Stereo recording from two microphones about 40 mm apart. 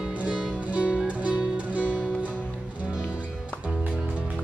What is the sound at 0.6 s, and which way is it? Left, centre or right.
Music, right.